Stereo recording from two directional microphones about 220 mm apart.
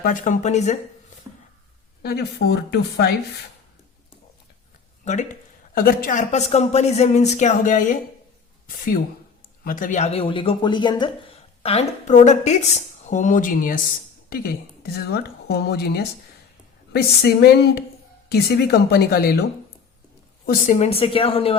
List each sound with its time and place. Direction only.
0.0 s speech: 35° left (ahead or behind)
2.0 s a woman's voice: 45° left (ahead or behind)
5.0 s a woman's voice: 35° left (ahead or behind)
20.5 s speech: 30° left (ahead or behind)